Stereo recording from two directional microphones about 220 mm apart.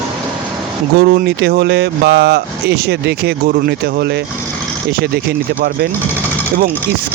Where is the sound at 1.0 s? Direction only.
45° right (ahead or behind).